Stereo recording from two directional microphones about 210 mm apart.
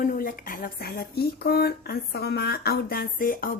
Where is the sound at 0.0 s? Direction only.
40° left (ahead or behind).